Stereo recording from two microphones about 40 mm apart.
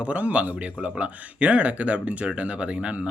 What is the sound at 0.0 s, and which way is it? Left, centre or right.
Speech, right.